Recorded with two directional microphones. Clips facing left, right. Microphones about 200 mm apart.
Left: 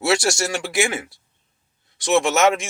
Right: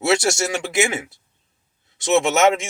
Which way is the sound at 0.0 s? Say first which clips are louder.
Right 1 dB; 20° right (ahead or behind).